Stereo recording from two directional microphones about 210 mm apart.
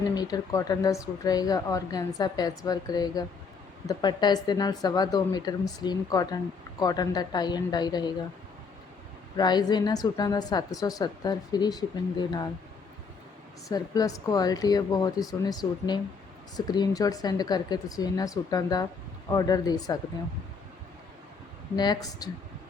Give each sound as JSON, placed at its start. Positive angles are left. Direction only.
{"t": 0.1, "sound": "a woman's voice", "side_deg": 20}
{"t": 9.3, "sound": "a woman's voice", "side_deg": 20}
{"t": 13.7, "sound": "a woman's voice", "side_deg": 15}
{"t": 21.8, "sound": "a woman's voice", "side_deg": 20}